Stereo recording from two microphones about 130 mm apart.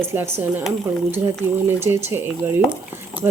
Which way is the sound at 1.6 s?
15° right (ahead or behind).